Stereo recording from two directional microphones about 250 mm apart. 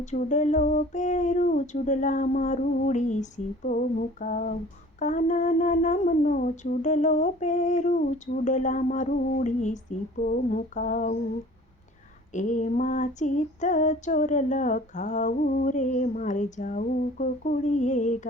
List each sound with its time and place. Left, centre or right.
0.0 s female singing: left
12.3 s female singing: left